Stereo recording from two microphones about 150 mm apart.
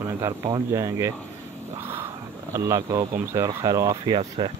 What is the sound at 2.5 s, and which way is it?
Speech, 20° right (ahead or behind).